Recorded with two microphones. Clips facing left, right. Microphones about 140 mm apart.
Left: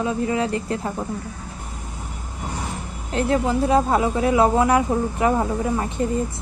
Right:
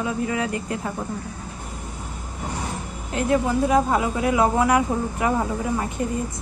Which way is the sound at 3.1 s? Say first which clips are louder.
Left 1 dB; 30° left (ahead or behind).